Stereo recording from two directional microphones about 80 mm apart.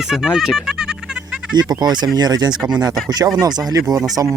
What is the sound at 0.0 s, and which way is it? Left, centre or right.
Music, centre.